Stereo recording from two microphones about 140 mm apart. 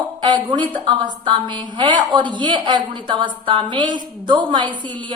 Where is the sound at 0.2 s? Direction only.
35° right (ahead or behind).